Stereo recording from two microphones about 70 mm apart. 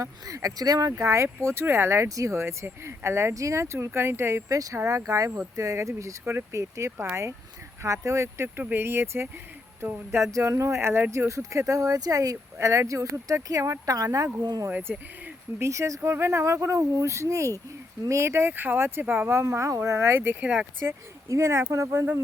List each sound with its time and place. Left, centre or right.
0.0 s speech: right
1.0 s speech: right
2.0 s speech: right
6.9 s speech: right
8.0 s speech: right
10.3 s speech: right
14.4 s speech: right
14.7 s speech: right
15.6 s speech: right
19.5 s speech: right